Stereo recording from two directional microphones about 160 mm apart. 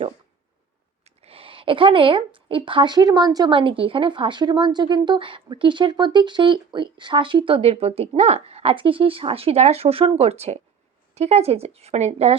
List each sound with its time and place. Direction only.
1.0 s speech: 40° right (ahead or behind)